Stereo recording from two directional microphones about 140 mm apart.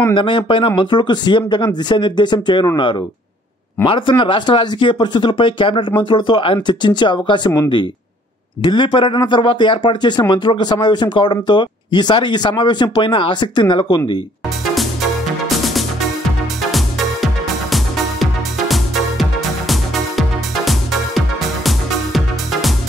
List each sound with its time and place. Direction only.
0.1 s speech: 35° left (ahead or behind)
8.6 s speech: 35° left (ahead or behind)
15.4 s music: centre (ahead or behind)